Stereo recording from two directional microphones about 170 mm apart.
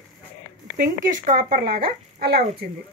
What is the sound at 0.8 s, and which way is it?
Speech, 50° right (ahead or behind).